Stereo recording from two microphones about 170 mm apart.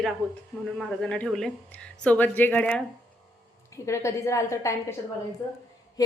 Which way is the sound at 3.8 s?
15° left (ahead or behind).